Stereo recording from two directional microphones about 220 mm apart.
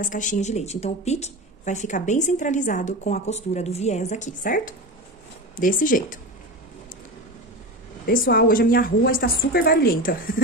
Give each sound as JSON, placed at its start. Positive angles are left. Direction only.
{"t": 0.0, "sound": "speech", "side_deg": 35}
{"t": 8.1, "sound": "speech", "side_deg": 40}